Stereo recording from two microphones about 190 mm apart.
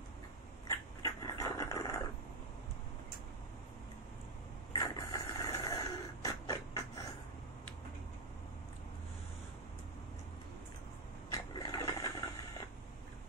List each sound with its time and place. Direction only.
0.7 s dog: 15° left (ahead or behind)
4.7 s vehicle: 20° left (ahead or behind)
11.3 s a sound: 20° left (ahead or behind)